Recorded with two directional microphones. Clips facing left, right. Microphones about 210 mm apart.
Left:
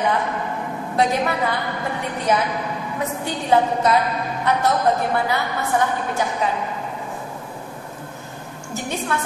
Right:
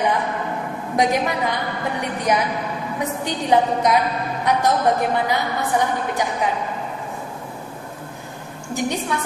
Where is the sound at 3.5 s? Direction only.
15° right (ahead or behind).